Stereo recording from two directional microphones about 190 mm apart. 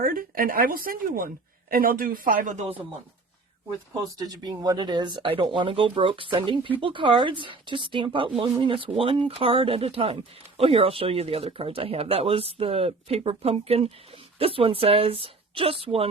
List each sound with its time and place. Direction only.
0.0 s speech: 50° right (ahead or behind)
4.2 s speech: 20° right (ahead or behind)